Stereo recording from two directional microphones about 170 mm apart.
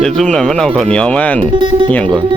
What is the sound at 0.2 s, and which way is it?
Speech, 5° left (ahead or behind).